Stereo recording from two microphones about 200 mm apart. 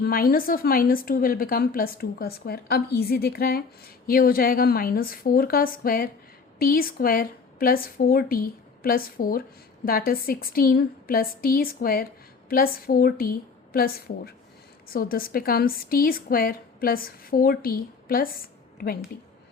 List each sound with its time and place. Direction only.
0.0 s a woman's voice: 45° left (ahead or behind)